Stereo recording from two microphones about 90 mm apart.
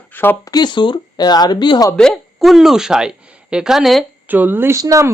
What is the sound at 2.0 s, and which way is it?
A woman's voice, 5° left (ahead or behind).